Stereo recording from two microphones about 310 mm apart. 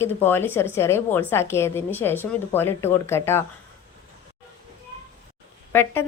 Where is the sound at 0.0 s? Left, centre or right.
Centre.